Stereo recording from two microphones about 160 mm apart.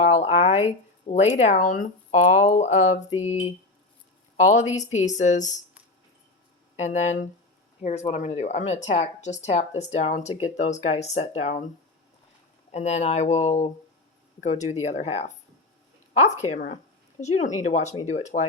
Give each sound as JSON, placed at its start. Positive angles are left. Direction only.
{"t": 0.0, "sound": "speech", "side_deg": 45}
{"t": 6.7, "sound": "speech", "side_deg": 45}
{"t": 12.7, "sound": "speech", "side_deg": 45}